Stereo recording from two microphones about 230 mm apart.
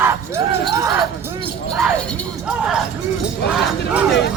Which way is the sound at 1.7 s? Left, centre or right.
Centre.